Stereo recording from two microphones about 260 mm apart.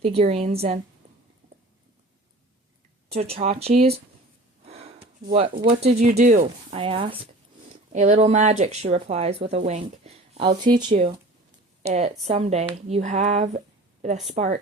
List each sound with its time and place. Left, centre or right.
0.0 s speech: right
3.1 s speech: right
4.6 s a sound: right
5.3 s speech: right